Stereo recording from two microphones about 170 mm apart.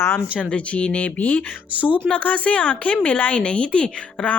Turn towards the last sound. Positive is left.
turn(degrees=5)  # may be behind; listen again after turning